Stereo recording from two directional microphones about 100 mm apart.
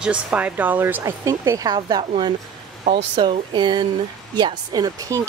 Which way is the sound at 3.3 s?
55° right (ahead or behind).